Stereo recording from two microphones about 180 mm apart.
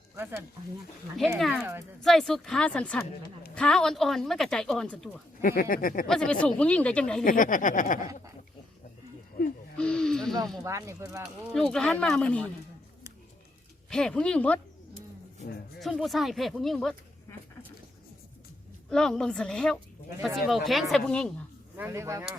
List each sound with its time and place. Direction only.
1.4 s a woman's voice: centre (ahead or behind)
5.4 s speech: 55° left (ahead or behind)
6.1 s speech: 5° left (ahead or behind)
7.3 s speech: 45° left (ahead or behind)
9.7 s speech: 5° left (ahead or behind)
10.6 s speech: 15° right (ahead or behind)
11.5 s a woman's voice: centre (ahead or behind)
13.9 s a woman's voice: 5° left (ahead or behind)
15.8 s a woman's voice: centre (ahead or behind)
18.9 s a woman's voice: 5° left (ahead or behind)
21.8 s speech: 15° right (ahead or behind)